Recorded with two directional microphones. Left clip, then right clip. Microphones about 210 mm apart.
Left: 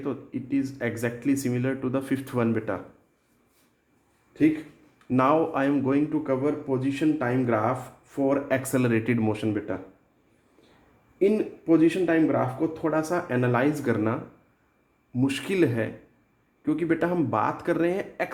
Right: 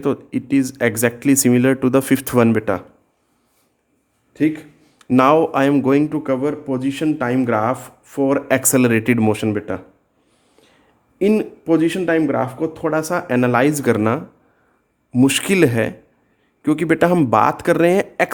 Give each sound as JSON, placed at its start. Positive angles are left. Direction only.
{"t": 0.0, "sound": "a man's voice", "side_deg": -50}
{"t": 4.4, "sound": "a man's voice", "side_deg": -50}
{"t": 11.2, "sound": "a man's voice", "side_deg": -45}